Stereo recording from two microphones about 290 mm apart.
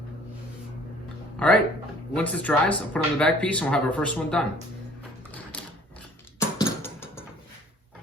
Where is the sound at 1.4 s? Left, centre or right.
Centre.